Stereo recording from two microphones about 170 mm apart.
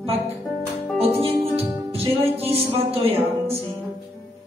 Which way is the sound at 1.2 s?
35° right (ahead or behind).